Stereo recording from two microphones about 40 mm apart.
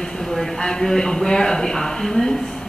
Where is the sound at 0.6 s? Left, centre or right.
Centre.